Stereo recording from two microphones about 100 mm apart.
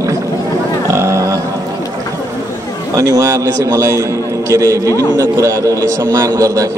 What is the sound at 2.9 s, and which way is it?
A man's voice, 35° right (ahead or behind).